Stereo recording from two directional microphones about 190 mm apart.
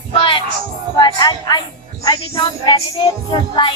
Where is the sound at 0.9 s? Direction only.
20° left (ahead or behind).